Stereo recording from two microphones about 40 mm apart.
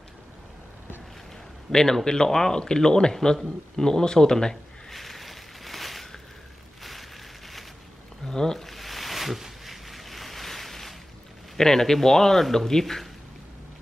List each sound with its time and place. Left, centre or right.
1.7 s speech: centre
4.8 s a sound: centre
8.3 s speech: centre
8.6 s boat: centre
11.5 s speech: centre